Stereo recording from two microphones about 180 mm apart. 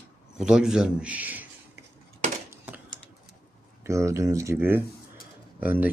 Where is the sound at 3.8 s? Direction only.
15° right (ahead or behind).